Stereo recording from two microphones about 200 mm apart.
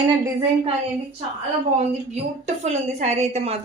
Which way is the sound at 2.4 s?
35° right (ahead or behind).